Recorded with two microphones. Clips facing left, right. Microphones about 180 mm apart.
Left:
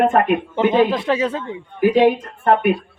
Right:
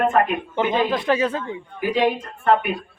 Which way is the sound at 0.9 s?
25° left (ahead or behind).